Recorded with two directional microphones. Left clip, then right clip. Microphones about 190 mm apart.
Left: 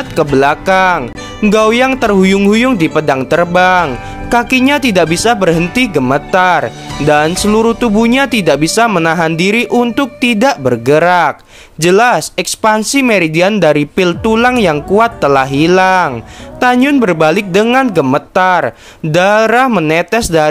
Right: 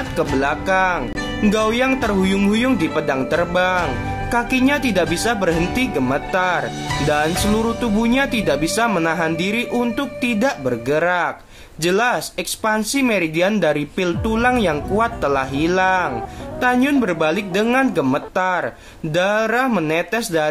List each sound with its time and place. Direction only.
0.1 s speech: 45° left (ahead or behind)